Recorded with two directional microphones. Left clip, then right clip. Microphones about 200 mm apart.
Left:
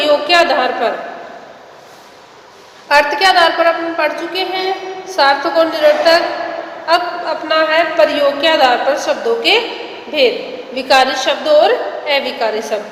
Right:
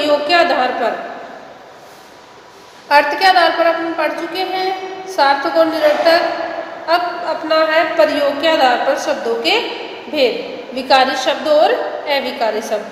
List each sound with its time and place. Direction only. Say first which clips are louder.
0.0 s a man's voice: left 2 dB; 10° right (ahead or behind)
2.9 s a man's voice: left 1 dB; 10° right (ahead or behind)